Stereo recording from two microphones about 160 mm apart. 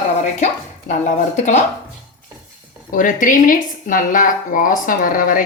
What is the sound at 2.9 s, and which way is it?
Speech, 55° left (ahead or behind).